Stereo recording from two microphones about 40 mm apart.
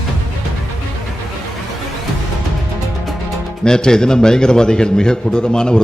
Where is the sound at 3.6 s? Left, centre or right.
Centre.